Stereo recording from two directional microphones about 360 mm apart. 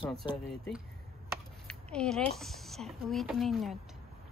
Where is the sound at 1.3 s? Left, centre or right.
Centre.